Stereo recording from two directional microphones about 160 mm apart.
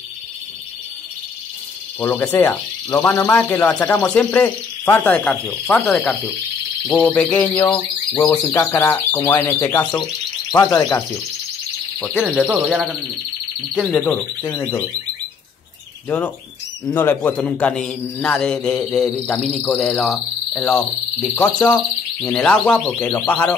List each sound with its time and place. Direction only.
2.0 s speech: 15° left (ahead or behind)
12.0 s speech: 5° right (ahead or behind)
13.7 s speech: 5° left (ahead or behind)
16.1 s speech: 10° left (ahead or behind)
20.0 s cricket: centre (ahead or behind)
21.4 s speech: 10° left (ahead or behind)